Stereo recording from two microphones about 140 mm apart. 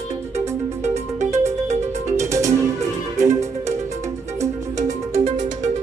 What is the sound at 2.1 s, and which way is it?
Music, 20° right (ahead or behind).